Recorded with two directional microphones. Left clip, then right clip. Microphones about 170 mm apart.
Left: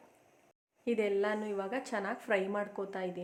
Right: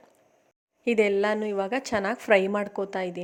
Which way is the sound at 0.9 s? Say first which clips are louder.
Right 9 dB; 50° right (ahead or behind).